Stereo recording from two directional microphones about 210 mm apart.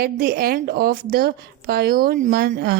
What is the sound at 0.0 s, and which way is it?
A woman's voice, 45° right (ahead or behind).